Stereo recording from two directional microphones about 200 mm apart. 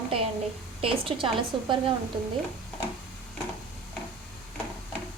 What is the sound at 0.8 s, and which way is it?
Speech, 30° right (ahead or behind).